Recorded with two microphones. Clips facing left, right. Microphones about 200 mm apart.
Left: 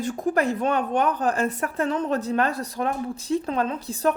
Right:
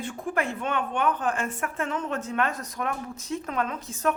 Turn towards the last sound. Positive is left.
turn(degrees=35)  # may be behind; listen again after turning